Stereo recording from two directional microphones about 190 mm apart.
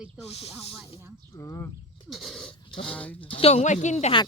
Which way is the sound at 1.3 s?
15° left (ahead or behind).